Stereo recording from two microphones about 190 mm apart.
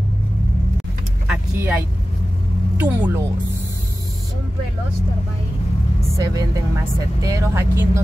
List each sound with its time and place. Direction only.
1.2 s vehicle: 10° right (ahead or behind)
2.8 s speech: 10° right (ahead or behind)
5.9 s speech: 15° right (ahead or behind)